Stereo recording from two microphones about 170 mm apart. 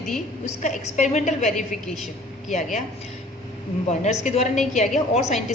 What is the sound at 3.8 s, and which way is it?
A woman's voice, 40° left (ahead or behind).